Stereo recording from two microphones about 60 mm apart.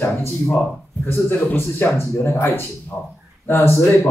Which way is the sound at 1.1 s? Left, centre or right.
Left.